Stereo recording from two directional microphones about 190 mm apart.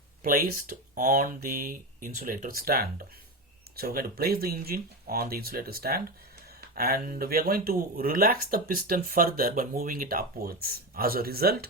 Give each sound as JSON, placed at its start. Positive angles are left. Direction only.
{"t": 0.2, "sound": "speech", "side_deg": -50}